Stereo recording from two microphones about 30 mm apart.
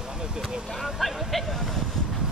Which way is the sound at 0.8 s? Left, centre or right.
Centre.